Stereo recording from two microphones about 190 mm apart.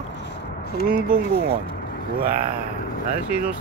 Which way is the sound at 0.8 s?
50° right (ahead or behind).